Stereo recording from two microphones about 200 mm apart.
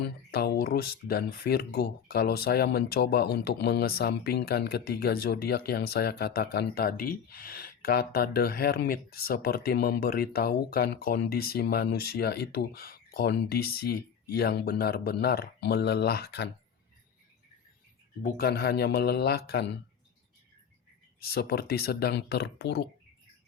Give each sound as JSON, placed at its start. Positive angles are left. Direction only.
{"t": 0.0, "sound": "speech", "side_deg": 50}
{"t": 18.2, "sound": "speech", "side_deg": 50}
{"t": 21.2, "sound": "speech", "side_deg": 50}